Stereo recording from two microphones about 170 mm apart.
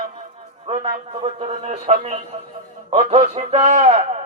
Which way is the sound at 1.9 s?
40° right (ahead or behind).